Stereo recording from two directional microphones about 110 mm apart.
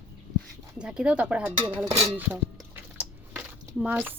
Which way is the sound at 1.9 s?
70° right (ahead or behind).